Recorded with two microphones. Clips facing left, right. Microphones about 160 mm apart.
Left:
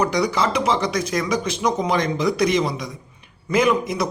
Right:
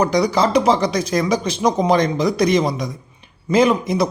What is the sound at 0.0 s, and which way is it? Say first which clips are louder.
Speech: right 4 dB; 35° right (ahead or behind).